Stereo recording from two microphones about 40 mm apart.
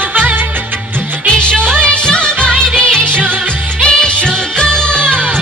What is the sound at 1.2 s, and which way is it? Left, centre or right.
Music, left.